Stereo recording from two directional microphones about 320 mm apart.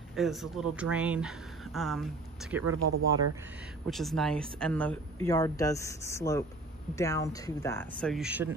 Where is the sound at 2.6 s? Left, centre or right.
Right.